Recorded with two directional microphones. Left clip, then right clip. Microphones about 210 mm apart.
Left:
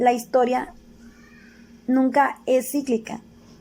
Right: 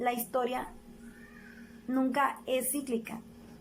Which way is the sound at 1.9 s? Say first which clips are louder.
Left 10 dB; 30° left (ahead or behind).